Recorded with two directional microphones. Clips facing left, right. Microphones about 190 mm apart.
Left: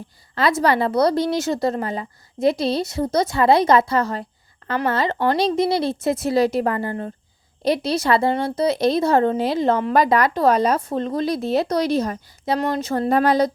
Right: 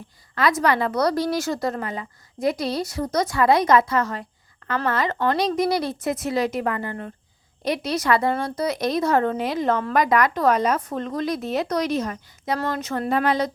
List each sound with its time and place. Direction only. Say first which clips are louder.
0.3 s speech: left 2 dB; 30° left (ahead or behind)
12.5 s speech: left 4 dB; 20° left (ahead or behind)
12.8 s speech: left 5 dB; 30° left (ahead or behind)